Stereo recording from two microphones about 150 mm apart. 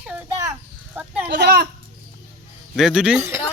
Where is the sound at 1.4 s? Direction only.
90° right.